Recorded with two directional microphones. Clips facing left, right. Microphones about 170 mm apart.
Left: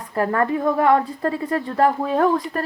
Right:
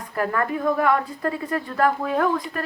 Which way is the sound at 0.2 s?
30° left (ahead or behind).